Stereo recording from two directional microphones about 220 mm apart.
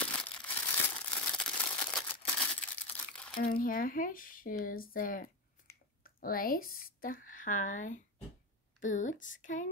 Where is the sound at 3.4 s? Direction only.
40° left (ahead or behind).